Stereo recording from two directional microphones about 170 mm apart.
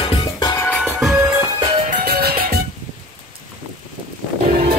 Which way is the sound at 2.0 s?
65° right (ahead or behind).